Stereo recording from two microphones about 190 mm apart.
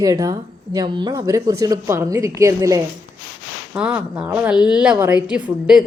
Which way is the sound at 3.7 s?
5° right (ahead or behind).